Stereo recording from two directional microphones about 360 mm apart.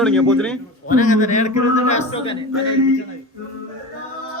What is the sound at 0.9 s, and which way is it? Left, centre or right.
Speech, left.